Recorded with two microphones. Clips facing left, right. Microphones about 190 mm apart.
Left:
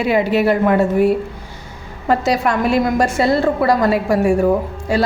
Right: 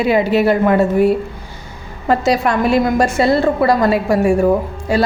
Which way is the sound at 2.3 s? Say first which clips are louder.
Right 3 dB; 30° right (ahead or behind).